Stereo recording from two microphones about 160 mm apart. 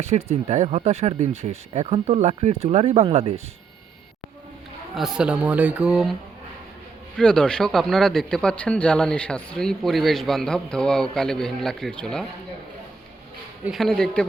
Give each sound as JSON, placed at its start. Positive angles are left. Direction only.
{"t": 0.0, "sound": "speech", "side_deg": -45}
{"t": 4.9, "sound": "speech", "side_deg": -5}
{"t": 7.2, "sound": "speech", "side_deg": 5}
{"t": 13.7, "sound": "speech", "side_deg": 0}